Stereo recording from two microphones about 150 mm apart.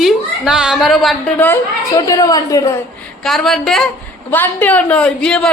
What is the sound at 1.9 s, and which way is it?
Speech, 25° left (ahead or behind).